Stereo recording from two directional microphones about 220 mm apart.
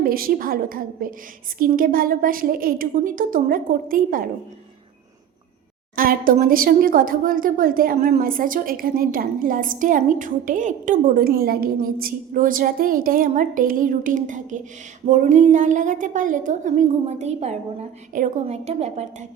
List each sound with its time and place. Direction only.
0.0 s a woman's voice: 40° right (ahead or behind)
6.0 s a woman's voice: 40° right (ahead or behind)